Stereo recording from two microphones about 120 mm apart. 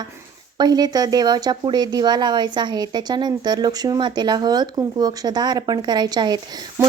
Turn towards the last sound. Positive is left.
turn(degrees=-35)  # may be behind; listen again after turning